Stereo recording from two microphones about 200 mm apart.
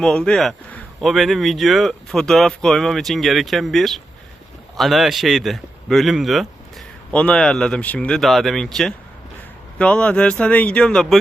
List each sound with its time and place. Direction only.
0.0 s speech: 5° left (ahead or behind)